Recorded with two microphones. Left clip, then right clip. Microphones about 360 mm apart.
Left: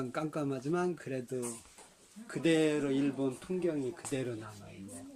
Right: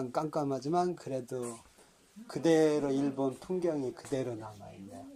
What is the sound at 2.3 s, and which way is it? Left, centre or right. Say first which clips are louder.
Speech: right 3 dB; centre.